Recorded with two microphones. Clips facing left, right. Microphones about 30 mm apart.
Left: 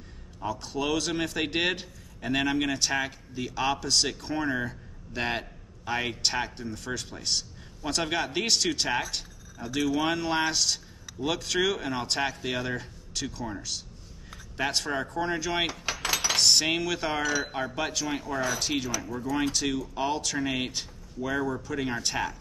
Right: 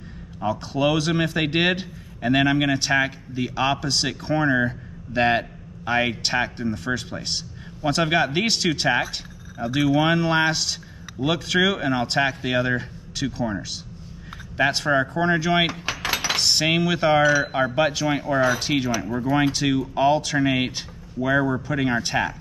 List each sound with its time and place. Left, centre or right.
0.4 s a man's voice: right
16.3 s a man's voice: centre